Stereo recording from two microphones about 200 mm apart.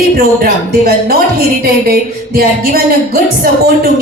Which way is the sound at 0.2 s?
50° right (ahead or behind).